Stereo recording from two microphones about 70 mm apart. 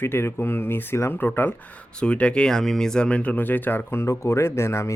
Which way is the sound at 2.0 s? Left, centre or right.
Centre.